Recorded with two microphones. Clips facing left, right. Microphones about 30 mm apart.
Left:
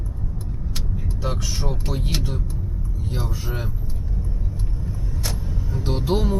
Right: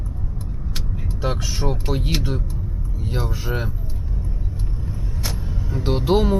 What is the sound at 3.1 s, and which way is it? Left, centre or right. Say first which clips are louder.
Speech: right 4 dB; centre.